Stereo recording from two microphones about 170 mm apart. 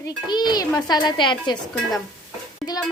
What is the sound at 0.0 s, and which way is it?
A woman's voice, 25° left (ahead or behind).